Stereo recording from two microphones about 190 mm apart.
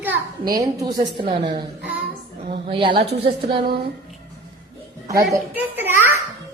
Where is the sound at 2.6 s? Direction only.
25° right (ahead or behind).